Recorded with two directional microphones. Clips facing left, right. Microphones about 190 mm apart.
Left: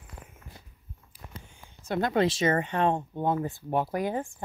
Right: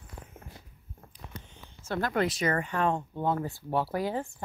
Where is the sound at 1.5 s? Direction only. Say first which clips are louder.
Left 3 dB; 20° left (ahead or behind).